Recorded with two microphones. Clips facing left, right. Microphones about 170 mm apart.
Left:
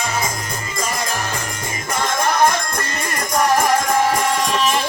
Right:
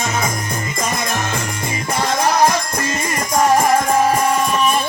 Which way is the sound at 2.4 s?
55° left (ahead or behind).